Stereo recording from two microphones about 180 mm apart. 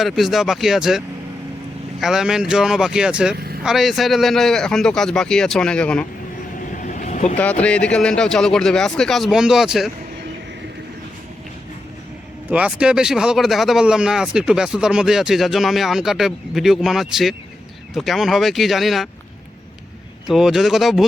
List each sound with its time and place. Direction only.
0.0 s speech: centre (ahead or behind)
3.3 s vehicle: 60° right (ahead or behind)
3.6 s speech: centre (ahead or behind)
6.7 s vehicle: 45° left (ahead or behind)
7.3 s speech: 10° left (ahead or behind)
12.5 s speech: 5° right (ahead or behind)
20.2 s speech: centre (ahead or behind)